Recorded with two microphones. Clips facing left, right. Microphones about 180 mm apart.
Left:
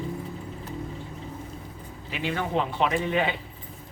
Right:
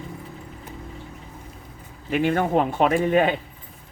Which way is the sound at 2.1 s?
50° right (ahead or behind).